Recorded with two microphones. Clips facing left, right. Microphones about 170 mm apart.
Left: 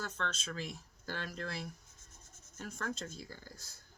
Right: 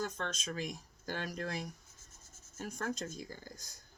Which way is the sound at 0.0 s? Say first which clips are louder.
Right 2 dB; 15° right (ahead or behind).